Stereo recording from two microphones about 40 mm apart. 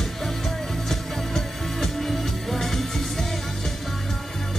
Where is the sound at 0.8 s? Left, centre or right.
Centre.